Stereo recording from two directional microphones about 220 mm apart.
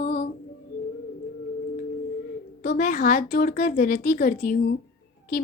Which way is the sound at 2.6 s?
40° left (ahead or behind).